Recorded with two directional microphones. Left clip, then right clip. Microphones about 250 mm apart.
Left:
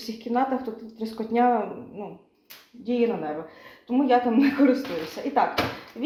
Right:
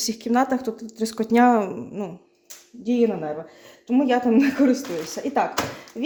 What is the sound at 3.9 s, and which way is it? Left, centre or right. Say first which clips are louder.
Speech: right 1 dB; right.